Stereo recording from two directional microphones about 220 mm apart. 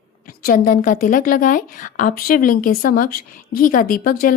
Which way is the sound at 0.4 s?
40° left (ahead or behind).